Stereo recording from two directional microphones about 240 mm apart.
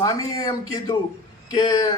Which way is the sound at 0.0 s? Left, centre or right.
Centre.